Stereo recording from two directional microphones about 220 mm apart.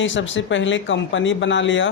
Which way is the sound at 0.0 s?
60° left (ahead or behind).